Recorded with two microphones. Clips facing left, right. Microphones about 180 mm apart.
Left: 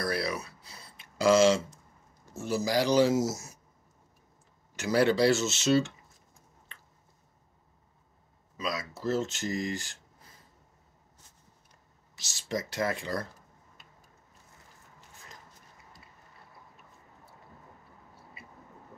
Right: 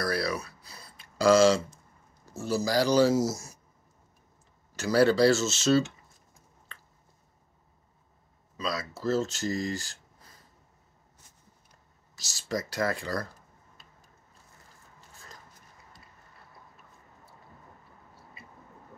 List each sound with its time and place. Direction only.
0.0 s a sound: 20° left (ahead or behind)
2.3 s speech: 20° left (ahead or behind)
4.7 s speech: 20° left (ahead or behind)
8.6 s speech: 15° left (ahead or behind)
9.2 s speech: 40° right (ahead or behind)
12.3 s speech: 20° left (ahead or behind)
15.0 s a sound: 15° left (ahead or behind)